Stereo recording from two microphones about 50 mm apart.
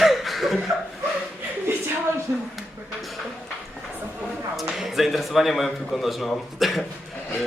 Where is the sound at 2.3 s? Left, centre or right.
Right.